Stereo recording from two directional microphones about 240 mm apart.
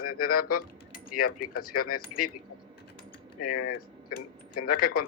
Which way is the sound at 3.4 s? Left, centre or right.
Left.